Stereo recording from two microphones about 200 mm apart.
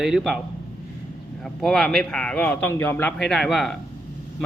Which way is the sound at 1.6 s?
Centre (ahead or behind).